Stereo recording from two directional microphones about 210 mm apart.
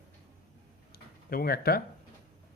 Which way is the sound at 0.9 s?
45° left (ahead or behind).